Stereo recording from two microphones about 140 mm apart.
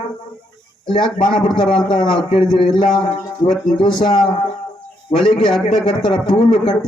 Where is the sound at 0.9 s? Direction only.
35° left (ahead or behind).